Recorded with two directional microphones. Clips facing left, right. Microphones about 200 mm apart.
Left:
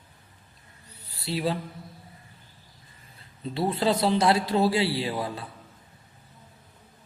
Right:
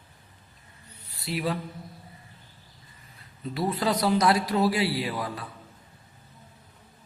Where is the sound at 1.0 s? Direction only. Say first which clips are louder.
Left 1 dB; 30° left (ahead or behind).